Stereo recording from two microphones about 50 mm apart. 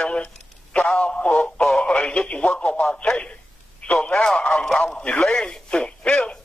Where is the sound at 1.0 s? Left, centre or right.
Left.